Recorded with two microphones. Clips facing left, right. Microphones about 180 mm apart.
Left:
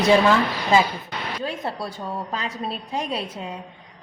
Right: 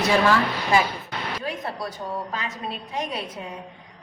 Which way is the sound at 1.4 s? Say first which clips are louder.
Left 2 dB; 25° left (ahead or behind).